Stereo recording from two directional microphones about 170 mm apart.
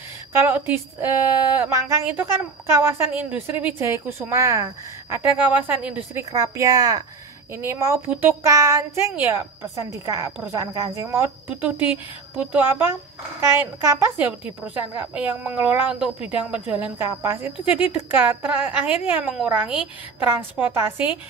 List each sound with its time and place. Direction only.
0.3 s a woman's voice: 15° right (ahead or behind)
6.3 s a woman's voice: 20° right (ahead or behind)